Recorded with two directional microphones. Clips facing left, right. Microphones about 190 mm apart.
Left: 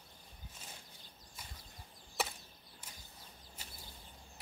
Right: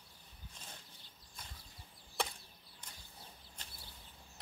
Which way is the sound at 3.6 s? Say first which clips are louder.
Left 2 dB; 5° left (ahead or behind).